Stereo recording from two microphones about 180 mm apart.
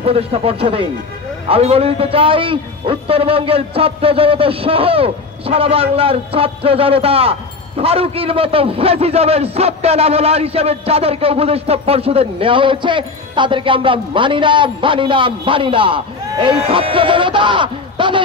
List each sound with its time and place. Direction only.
0.0 s a man's voice: 35° right (ahead or behind)